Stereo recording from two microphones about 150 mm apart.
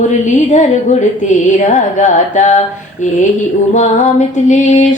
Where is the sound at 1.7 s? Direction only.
55° left (ahead or behind).